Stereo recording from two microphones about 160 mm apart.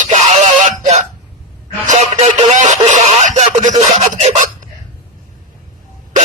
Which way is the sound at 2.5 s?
50° right (ahead or behind).